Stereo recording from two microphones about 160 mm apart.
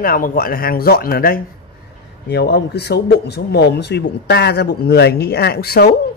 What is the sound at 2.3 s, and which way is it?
Speech, 90° left.